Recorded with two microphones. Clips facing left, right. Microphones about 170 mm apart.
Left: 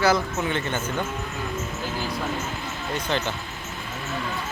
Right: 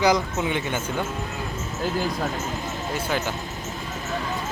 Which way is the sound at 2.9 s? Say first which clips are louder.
Left 1 dB; 5° right (ahead or behind).